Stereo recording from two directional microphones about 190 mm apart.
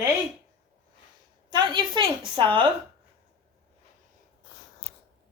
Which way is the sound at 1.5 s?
25° right (ahead or behind).